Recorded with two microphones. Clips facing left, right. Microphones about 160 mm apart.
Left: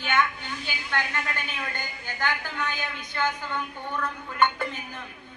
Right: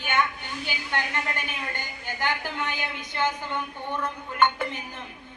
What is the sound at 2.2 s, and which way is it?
A woman's voice, 20° right (ahead or behind).